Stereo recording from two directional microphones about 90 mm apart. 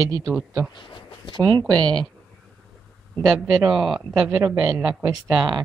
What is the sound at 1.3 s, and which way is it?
Speech, 60° right (ahead or behind).